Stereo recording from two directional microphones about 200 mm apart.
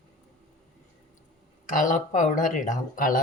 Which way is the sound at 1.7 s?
40° left (ahead or behind).